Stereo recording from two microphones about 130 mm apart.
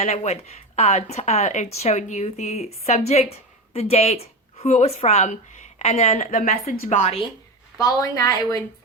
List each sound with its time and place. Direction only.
0.0 s a woman's voice: 55° left (ahead or behind)
7.8 s speech: 25° left (ahead or behind)